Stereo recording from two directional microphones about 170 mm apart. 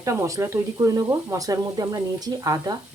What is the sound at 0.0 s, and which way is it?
Speech, 20° right (ahead or behind).